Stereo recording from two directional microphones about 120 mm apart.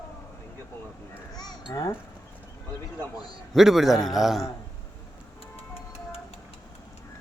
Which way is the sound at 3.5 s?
Centre (ahead or behind).